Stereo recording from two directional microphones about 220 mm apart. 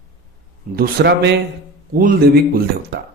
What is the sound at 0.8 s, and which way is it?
Speech, 50° right (ahead or behind).